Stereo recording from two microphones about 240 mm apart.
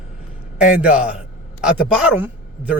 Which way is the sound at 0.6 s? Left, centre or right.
Centre.